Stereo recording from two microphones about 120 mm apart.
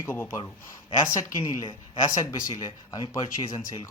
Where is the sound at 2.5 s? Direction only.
40° left (ahead or behind).